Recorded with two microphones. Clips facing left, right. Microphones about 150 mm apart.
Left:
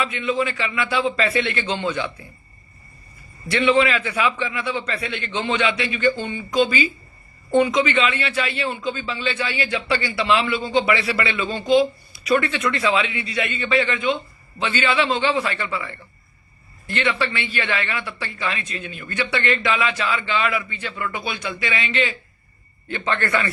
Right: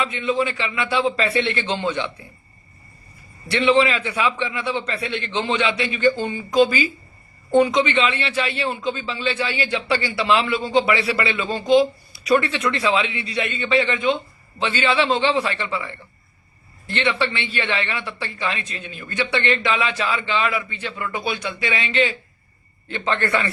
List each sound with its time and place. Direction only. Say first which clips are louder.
0.1 s a man's voice: right 1 dB; 30° right (ahead or behind)
3.5 s a man's voice: right 1 dB; 30° right (ahead or behind)
16.9 s a man's voice: right 1 dB; 25° right (ahead or behind)